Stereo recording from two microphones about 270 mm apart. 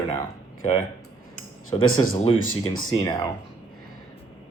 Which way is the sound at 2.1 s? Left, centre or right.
Left.